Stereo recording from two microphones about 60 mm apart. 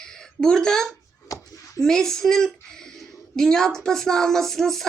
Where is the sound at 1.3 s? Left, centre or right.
Left.